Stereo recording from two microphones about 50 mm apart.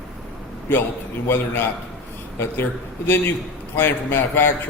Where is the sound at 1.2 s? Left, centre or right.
Left.